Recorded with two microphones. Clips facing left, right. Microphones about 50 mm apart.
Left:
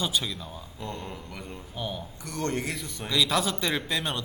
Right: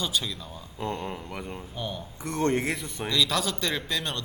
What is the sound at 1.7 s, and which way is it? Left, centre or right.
Speech, centre.